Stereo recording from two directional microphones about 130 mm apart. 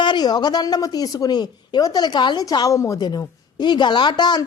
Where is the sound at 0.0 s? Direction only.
35° left (ahead or behind).